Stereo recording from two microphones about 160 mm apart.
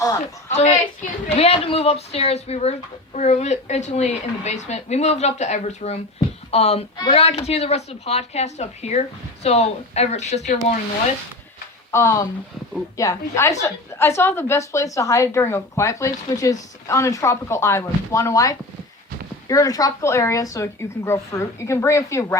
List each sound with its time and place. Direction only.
0.4 s speech: 45° left (ahead or behind)
11.9 s a woman's voice: 15° left (ahead or behind)